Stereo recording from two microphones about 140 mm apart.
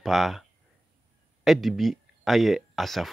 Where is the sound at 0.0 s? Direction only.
Centre (ahead or behind).